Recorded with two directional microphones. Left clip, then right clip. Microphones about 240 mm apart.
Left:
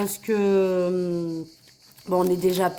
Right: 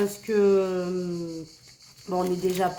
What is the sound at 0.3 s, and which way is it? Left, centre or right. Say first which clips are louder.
Speech: left 1 dB; left.